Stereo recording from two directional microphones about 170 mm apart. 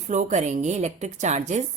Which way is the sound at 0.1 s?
45° right (ahead or behind).